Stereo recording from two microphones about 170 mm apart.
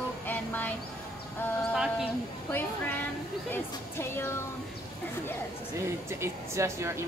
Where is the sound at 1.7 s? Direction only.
5° right (ahead or behind).